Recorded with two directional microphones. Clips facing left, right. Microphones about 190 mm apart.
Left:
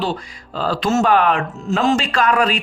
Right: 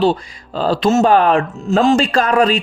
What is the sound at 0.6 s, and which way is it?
Speech, 25° right (ahead or behind).